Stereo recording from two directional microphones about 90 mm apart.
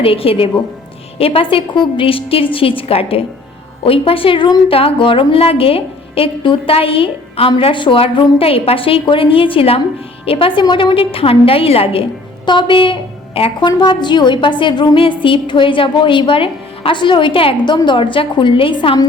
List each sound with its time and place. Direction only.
0.0 s a woman's voice: 90° left; by 4.5 s 75° left (ahead or behind)
4.7 s a woman's voice: 90° left
10.6 s a woman's voice: 60° left (ahead or behind); by 12.0 s 90° left
12.5 s a woman's voice: 65° left (ahead or behind)
13.6 s a woman's voice: 55° left (ahead or behind)
14.9 s a woman's voice: 75° left (ahead or behind)
17.8 s a woman's voice: 65° left (ahead or behind)